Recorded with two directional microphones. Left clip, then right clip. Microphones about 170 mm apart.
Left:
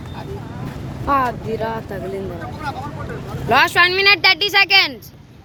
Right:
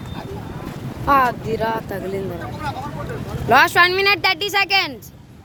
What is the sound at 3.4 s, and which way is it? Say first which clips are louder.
Speech: even; 20° right (ahead or behind).